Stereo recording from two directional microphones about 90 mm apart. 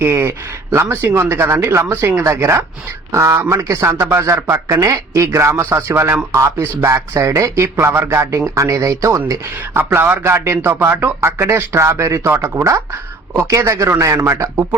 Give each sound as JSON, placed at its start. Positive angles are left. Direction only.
{"t": 0.0, "sound": "a man's voice", "side_deg": -25}
{"t": 9.7, "sound": "a man's voice", "side_deg": -20}